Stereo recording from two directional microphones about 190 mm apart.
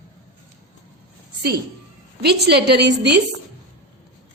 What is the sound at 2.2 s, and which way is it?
Speech, 60° right (ahead or behind).